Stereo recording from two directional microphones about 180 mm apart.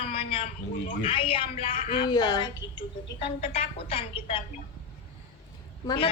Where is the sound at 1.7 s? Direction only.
50° left (ahead or behind).